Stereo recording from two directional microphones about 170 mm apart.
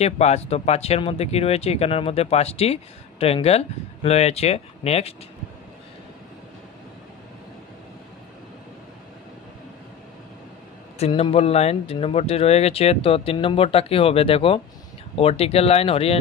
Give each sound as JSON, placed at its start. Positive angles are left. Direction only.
{"t": 0.0, "sound": "speech", "side_deg": 40}
{"t": 11.0, "sound": "speech", "side_deg": 35}